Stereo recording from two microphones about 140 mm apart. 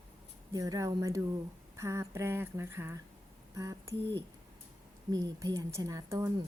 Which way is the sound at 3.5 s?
20° right (ahead or behind).